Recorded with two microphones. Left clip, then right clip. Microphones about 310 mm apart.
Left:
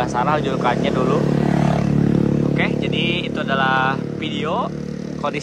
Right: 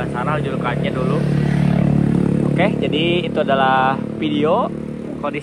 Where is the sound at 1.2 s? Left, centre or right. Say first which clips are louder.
Left 2 dB; left.